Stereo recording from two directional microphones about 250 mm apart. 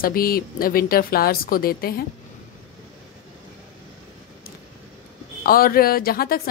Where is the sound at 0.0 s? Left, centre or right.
Left.